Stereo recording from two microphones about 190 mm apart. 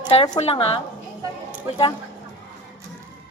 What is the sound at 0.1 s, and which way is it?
Speech, 30° left (ahead or behind).